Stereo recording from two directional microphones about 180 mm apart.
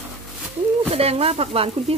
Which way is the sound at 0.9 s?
35° right (ahead or behind).